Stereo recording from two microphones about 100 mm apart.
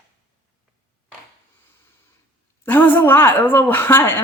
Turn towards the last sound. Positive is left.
turn(degrees=20)  # may be behind; listen again after turning